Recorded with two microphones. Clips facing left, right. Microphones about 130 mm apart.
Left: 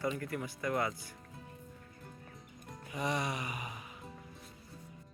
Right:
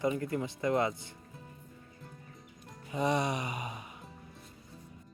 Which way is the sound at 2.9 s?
25° right (ahead or behind).